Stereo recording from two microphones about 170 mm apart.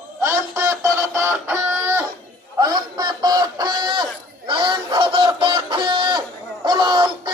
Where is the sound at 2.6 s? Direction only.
25° right (ahead or behind).